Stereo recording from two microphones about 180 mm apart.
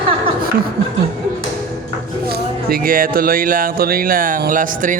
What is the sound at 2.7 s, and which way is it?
Speech, 55° right (ahead or behind).